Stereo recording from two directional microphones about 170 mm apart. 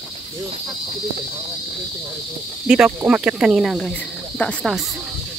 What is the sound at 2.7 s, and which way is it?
Cricket, 5° right (ahead or behind).